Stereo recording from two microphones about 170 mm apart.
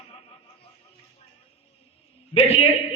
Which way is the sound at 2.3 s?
35° left (ahead or behind).